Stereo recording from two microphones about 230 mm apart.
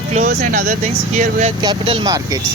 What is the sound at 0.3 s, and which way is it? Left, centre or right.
Speech, right.